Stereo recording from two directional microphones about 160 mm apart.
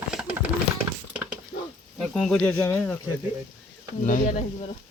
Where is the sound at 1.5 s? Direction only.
90° left.